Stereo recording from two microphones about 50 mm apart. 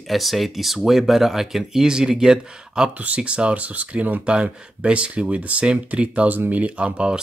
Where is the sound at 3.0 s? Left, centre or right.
Right.